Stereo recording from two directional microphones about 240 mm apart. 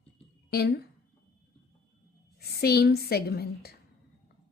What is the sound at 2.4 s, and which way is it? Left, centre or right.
A woman's voice, left.